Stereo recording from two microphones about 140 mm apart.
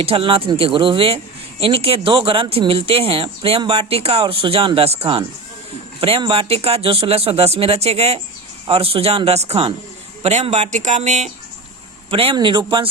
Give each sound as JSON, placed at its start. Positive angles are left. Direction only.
{"t": 0.0, "sound": "a man's voice", "side_deg": -40}
{"t": 12.1, "sound": "speech", "side_deg": -35}